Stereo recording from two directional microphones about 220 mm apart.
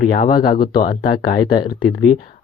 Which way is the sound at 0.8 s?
40° left (ahead or behind).